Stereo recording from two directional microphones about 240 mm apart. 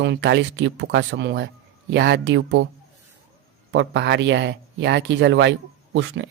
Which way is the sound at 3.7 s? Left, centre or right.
Right.